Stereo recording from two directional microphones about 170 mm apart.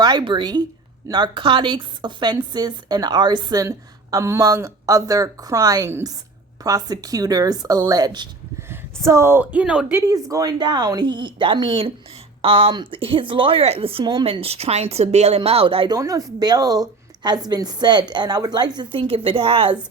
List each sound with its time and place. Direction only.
0.0 s a woman's voice: 25° right (ahead or behind); by 10.0 s 5° right (ahead or behind)
10.1 s a woman's voice: 20° right (ahead or behind)
16.0 s a woman's voice: 20° right (ahead or behind)